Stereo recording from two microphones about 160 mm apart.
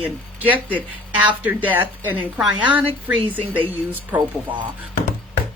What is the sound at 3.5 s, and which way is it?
Speech, 10° right (ahead or behind).